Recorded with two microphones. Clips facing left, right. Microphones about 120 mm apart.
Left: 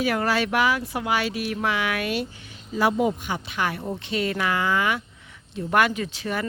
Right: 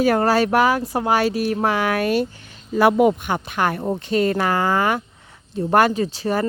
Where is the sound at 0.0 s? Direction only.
40° right (ahead or behind).